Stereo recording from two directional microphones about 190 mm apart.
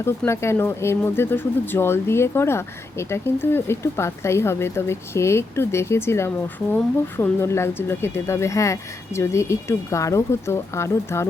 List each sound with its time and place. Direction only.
0.0 s speech: 15° left (ahead or behind)